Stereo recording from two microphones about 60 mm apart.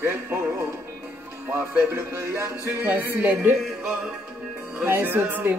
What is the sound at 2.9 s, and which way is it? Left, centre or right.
Speech, right.